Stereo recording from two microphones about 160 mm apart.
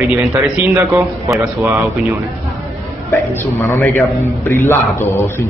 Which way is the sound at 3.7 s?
15° left (ahead or behind).